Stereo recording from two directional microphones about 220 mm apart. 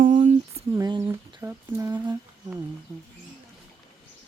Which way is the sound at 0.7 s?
15° right (ahead or behind).